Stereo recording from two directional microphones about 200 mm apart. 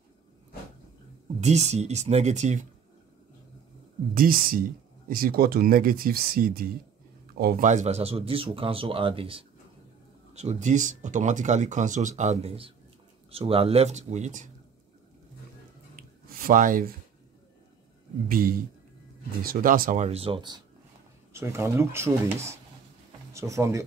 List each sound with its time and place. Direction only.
1.4 s speech: 35° right (ahead or behind)
4.1 s speech: 45° right (ahead or behind)
16.0 s a sound: 45° right (ahead or behind)
18.3 s speech: 45° right (ahead or behind); by 23.8 s 15° right (ahead or behind)